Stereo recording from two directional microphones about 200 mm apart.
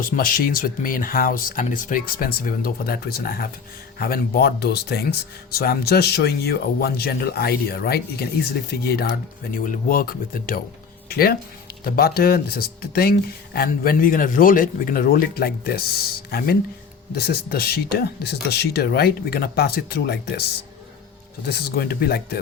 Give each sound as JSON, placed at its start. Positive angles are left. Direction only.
{"t": 0.0, "sound": "speech", "side_deg": 45}
{"t": 21.8, "sound": "speech", "side_deg": 50}